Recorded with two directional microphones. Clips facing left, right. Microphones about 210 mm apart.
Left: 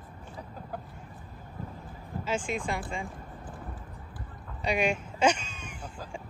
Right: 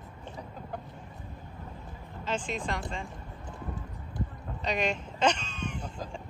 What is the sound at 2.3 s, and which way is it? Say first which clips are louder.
Speech: left 1 dB; 10° left (ahead or behind).